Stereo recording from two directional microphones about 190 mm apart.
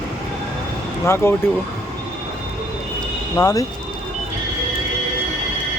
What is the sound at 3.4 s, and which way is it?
Speech, 20° left (ahead or behind).